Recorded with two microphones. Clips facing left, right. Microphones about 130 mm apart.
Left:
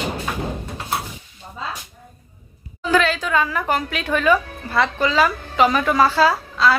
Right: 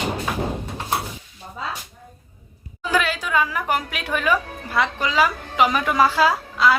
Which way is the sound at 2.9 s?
10° right (ahead or behind).